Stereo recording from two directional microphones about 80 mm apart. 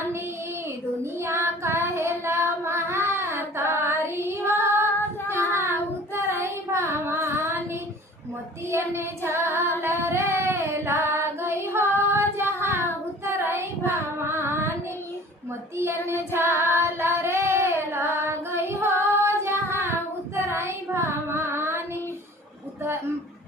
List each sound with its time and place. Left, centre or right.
1.2 s child singing: right
6.1 s child singing: right
8.7 s female singing: right
16.0 s child singing: right